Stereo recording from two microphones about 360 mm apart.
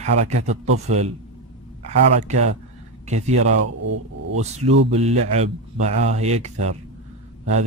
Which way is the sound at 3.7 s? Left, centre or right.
Right.